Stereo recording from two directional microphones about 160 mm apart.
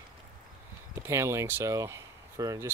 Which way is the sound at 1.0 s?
15° right (ahead or behind).